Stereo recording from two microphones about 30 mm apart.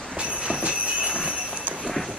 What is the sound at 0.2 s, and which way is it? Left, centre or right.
Train, right.